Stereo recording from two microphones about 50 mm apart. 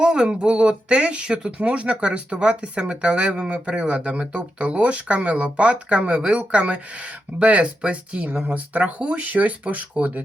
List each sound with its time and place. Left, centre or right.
0.0 s speech: centre